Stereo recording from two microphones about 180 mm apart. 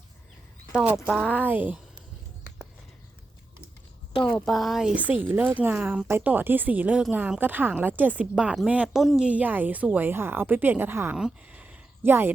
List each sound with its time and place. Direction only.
0.7 s speech: 5° right (ahead or behind)
1.3 s a woman's voice: 10° right (ahead or behind)
4.1 s speech: 30° left (ahead or behind)
4.4 s a woman's voice: centre (ahead or behind)